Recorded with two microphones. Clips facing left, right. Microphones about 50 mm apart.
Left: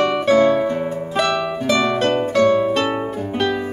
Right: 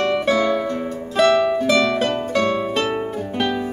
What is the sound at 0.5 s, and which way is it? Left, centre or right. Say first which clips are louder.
Music: left 3 dB; centre.